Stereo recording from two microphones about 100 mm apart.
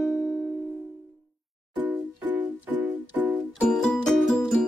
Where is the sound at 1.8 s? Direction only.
20° right (ahead or behind).